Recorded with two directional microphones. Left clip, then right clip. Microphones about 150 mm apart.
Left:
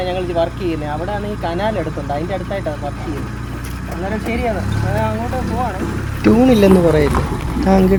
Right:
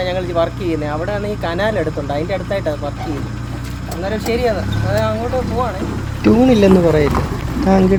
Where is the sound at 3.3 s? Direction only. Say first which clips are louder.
Even; 45° left (ahead or behind).